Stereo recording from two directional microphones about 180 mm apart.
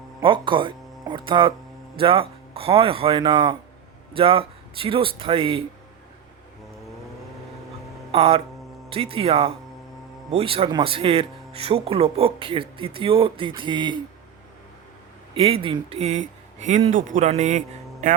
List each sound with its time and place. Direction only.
0.2 s speech: 25° right (ahead or behind)
8.1 s speech: 35° right (ahead or behind)
15.4 s speech: 30° right (ahead or behind); by 18.2 s 50° right (ahead or behind)